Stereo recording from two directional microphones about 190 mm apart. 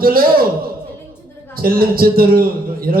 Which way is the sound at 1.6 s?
50° right (ahead or behind).